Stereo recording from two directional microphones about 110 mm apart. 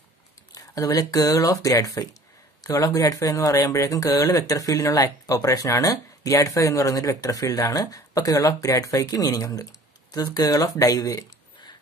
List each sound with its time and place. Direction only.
0.6 s speech: 30° left (ahead or behind)